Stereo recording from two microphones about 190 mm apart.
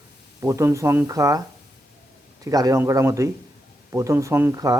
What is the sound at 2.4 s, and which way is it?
A man's voice, 15° right (ahead or behind).